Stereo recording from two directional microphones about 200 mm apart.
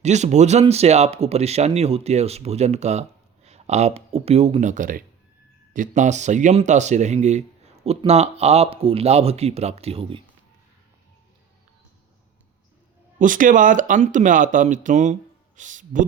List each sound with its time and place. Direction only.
0.0 s speech: 35° right (ahead or behind)
13.1 s speech: 40° right (ahead or behind)